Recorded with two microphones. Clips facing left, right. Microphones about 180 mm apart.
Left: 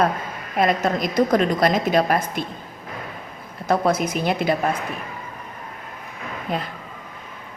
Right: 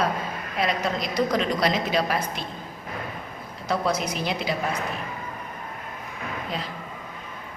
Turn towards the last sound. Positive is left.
turn(degrees=55)  # may be behind; listen again after turning